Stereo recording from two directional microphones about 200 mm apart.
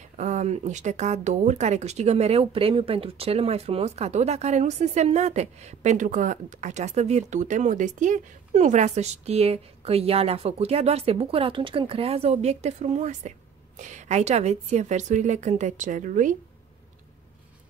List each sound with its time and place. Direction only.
0.2 s speech: 35° right (ahead or behind)